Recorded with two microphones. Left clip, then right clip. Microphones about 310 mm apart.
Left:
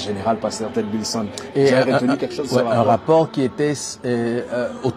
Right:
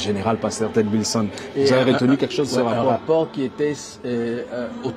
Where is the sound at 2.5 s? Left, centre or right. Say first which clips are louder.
Left 6 dB; left.